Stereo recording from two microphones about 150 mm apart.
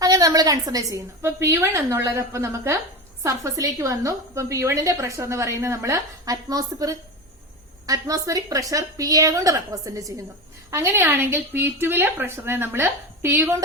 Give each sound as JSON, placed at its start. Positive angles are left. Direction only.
{"t": 0.0, "sound": "a woman's voice", "side_deg": -25}